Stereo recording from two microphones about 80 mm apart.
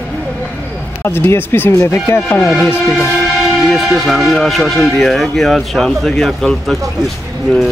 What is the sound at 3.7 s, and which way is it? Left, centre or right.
Speech, centre.